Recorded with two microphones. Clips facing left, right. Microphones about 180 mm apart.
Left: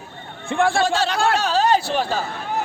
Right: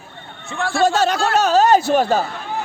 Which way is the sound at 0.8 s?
45° right (ahead or behind).